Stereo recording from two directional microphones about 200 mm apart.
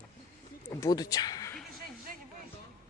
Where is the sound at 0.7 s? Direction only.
15° left (ahead or behind).